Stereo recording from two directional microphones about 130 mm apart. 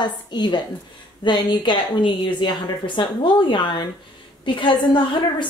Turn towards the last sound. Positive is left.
turn(degrees=40)  # may be behind; listen again after turning